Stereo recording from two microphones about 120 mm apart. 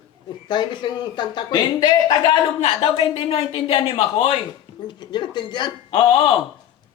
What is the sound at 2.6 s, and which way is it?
Speech, 50° left (ahead or behind).